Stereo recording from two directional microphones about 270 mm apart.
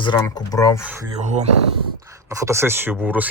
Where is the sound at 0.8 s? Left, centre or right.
Centre.